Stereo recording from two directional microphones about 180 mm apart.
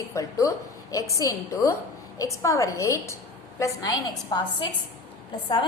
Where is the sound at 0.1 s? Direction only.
15° left (ahead or behind).